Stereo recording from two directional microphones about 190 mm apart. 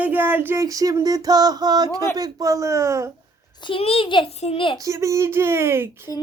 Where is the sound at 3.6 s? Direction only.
25° left (ahead or behind).